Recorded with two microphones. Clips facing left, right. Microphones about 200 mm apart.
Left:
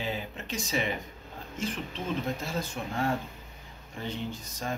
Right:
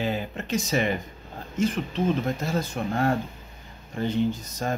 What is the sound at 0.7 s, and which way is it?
Speech, 65° right (ahead or behind).